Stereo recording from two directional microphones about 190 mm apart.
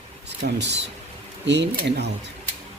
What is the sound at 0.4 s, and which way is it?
Speech, 65° right (ahead or behind).